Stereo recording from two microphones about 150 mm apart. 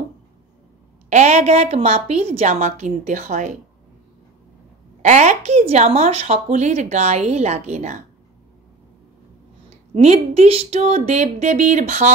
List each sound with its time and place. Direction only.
1.1 s a woman's voice: 50° right (ahead or behind)
5.0 s a woman's voice: 50° right (ahead or behind)
9.9 s a woman's voice: 45° right (ahead or behind)